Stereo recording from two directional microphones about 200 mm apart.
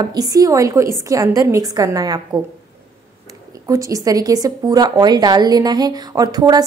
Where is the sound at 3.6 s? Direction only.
15° right (ahead or behind).